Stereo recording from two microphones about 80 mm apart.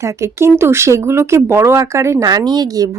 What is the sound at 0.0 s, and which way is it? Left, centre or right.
A woman's voice, right.